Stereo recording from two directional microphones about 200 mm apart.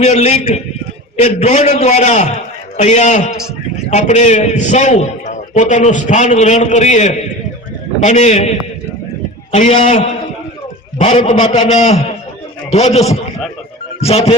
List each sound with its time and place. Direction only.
0.0 s a man's voice: 35° left (ahead or behind)